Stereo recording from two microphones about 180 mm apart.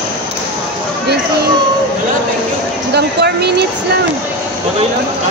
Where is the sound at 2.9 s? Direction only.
65° right (ahead or behind).